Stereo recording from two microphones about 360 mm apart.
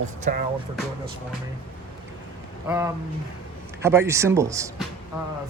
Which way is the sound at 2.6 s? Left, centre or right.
Centre.